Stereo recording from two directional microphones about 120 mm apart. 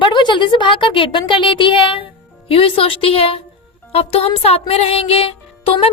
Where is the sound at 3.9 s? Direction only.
55° left (ahead or behind).